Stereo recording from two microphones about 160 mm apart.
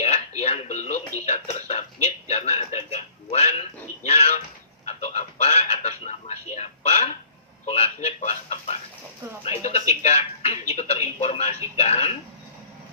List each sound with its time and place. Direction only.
0.0 s a man's voice: 40° left (ahead or behind)
4.9 s a sound: 45° left (ahead or behind)
7.6 s a man's voice: 40° left (ahead or behind)